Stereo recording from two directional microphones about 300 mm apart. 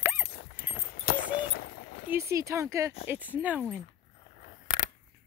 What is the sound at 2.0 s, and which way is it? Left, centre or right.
Speech, centre.